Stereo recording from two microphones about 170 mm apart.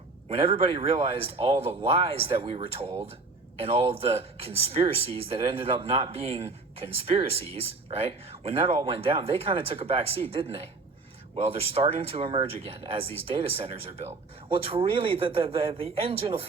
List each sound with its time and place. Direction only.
0.3 s speech: 35° right (ahead or behind)